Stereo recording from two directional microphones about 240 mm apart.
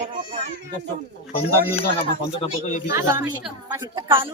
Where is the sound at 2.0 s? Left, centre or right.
Left.